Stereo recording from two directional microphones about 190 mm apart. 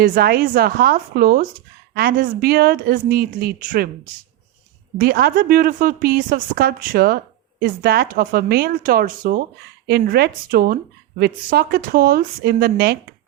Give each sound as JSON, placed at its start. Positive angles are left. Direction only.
{"t": 0.0, "sound": "a woman's voice", "side_deg": -50}
{"t": 4.9, "sound": "a woman's voice", "side_deg": -55}